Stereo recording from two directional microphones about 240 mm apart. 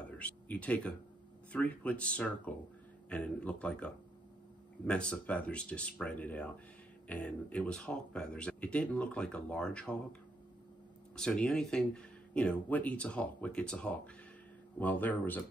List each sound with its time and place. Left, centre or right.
0.2 s speech: centre
11.1 s speech: centre